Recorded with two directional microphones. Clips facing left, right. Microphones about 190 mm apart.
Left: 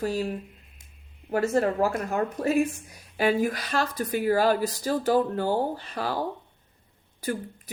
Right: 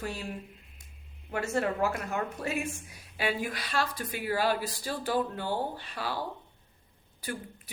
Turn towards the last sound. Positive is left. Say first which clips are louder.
# left 7 dB
turn(degrees=45)  # may be behind; listen again after turning